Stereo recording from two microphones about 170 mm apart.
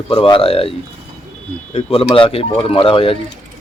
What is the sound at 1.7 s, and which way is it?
Speech, 35° left (ahead or behind).